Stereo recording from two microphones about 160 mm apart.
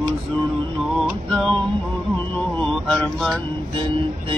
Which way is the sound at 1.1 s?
Centre (ahead or behind).